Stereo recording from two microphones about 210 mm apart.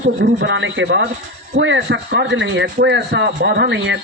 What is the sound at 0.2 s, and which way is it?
A man's voice, 55° right (ahead or behind).